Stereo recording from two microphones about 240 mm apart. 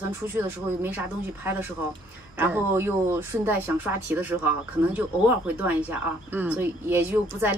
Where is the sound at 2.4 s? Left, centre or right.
Centre.